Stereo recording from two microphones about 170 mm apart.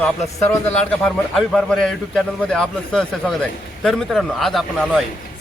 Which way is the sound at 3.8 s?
Centre (ahead or behind).